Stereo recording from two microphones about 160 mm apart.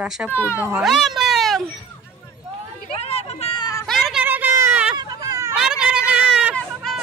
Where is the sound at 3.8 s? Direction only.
Centre (ahead or behind).